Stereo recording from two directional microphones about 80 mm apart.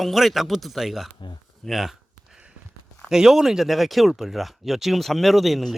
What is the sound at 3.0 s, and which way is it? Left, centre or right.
Speech, centre.